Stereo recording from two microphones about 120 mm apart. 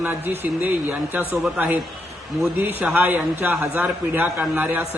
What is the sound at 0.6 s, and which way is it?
A man's voice, 15° right (ahead or behind).